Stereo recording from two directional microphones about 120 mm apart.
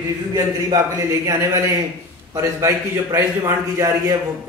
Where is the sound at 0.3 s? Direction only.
30° right (ahead or behind).